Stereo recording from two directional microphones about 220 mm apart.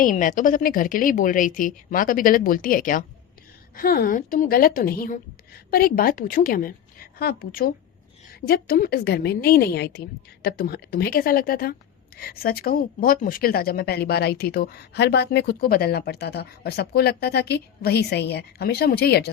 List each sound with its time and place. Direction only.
0.0 s a woman's voice: 35° left (ahead or behind)